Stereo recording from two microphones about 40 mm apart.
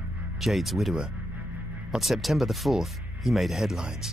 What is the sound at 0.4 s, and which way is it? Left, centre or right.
Speech, centre.